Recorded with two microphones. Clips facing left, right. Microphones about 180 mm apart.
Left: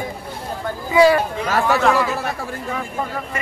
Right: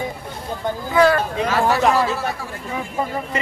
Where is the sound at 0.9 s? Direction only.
10° left (ahead or behind).